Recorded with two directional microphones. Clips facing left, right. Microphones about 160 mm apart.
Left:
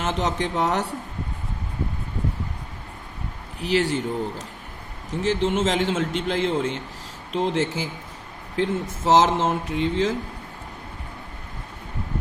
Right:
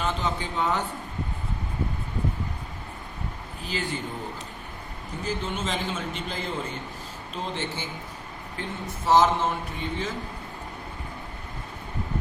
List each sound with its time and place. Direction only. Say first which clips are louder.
0.0 s speech: left 4 dB; 90° left
3.6 s speech: left 10 dB; 80° left
5.2 s a man's voice: left 9 dB; 90° left